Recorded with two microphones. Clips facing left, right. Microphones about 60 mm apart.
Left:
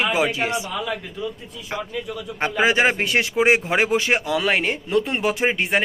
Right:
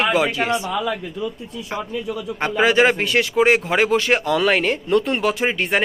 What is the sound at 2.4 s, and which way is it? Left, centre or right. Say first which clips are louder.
Speech: right 2 dB; centre.